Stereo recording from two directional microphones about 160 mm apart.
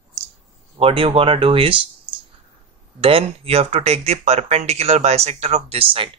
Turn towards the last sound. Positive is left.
turn(degrees=-35)  # may be behind; listen again after turning